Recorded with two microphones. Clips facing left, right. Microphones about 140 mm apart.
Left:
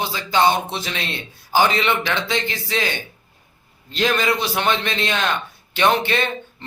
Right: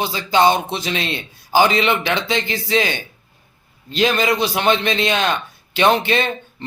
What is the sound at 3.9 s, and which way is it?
Speech, 15° right (ahead or behind).